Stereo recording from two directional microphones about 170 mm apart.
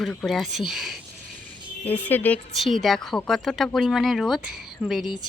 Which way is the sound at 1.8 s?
10° left (ahead or behind).